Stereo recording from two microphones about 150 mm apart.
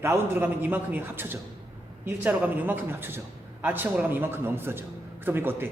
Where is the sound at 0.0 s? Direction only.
15° right (ahead or behind).